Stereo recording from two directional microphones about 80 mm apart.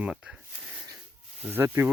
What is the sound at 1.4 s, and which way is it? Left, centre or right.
Speech, right.